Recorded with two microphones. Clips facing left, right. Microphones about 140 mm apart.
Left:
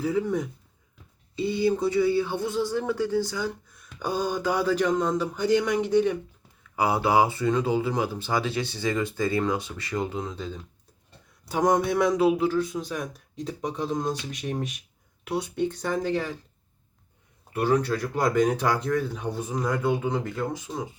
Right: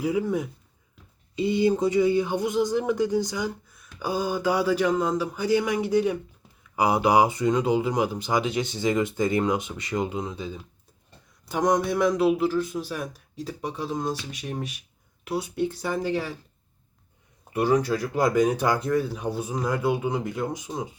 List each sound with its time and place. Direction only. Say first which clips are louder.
0.0 s speech: right 1 dB; 10° right (ahead or behind)
1.4 s speech: right 2 dB; 20° right (ahead or behind)
11.4 s speech: even; centre (ahead or behind)
17.5 s speech: right 1 dB; 10° right (ahead or behind)